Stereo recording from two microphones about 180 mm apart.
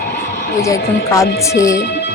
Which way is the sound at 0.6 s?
15° left (ahead or behind).